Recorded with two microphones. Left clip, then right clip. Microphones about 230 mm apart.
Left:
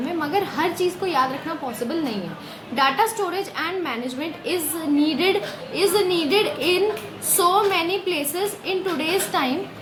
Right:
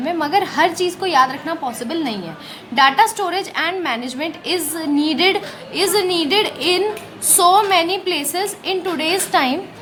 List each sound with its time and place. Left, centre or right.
0.0 s a woman's voice: right